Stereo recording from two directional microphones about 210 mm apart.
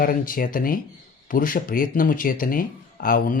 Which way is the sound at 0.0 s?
40° left (ahead or behind).